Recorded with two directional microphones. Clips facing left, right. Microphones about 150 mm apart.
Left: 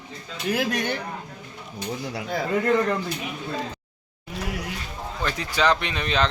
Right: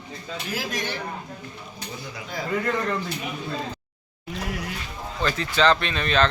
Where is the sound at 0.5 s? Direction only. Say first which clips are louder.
Left 5 dB; 60° left (ahead or behind).